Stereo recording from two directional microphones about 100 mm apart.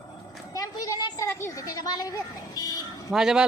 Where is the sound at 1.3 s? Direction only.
25° left (ahead or behind).